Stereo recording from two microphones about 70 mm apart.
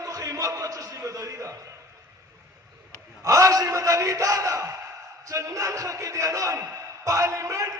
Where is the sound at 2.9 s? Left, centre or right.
Right.